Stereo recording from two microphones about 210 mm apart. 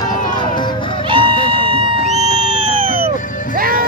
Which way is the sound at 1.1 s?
25° right (ahead or behind).